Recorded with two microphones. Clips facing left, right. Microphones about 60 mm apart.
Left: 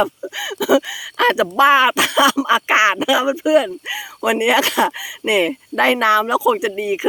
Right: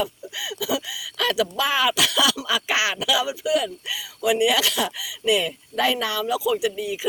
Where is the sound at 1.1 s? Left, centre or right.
Left.